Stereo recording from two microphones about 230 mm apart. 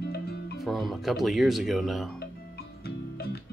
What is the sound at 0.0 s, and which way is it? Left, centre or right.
Music, left.